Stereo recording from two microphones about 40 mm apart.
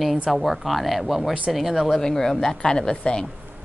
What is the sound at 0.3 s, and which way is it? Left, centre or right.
Speech, centre.